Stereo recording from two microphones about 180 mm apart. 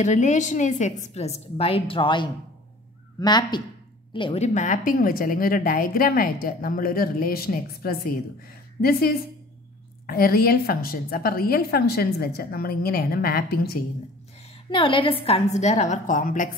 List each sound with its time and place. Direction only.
0.0 s a woman's voice: 40° left (ahead or behind); by 13.7 s 60° left (ahead or behind)
14.7 s a woman's voice: 30° left (ahead or behind); by 16.4 s 45° left (ahead or behind)